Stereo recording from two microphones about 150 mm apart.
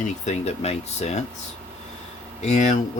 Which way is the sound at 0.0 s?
45° left (ahead or behind).